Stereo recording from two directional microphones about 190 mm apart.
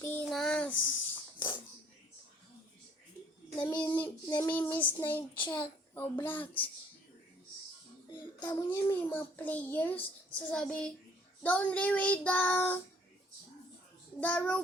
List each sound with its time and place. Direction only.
0.0 s child singing: 10° left (ahead or behind)
3.6 s child singing: 10° left (ahead or behind)
8.4 s a child's voice: 20° left (ahead or behind)
14.2 s a child's voice: 10° left (ahead or behind)